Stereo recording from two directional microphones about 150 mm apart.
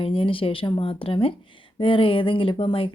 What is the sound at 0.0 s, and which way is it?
Speech, 35° left (ahead or behind).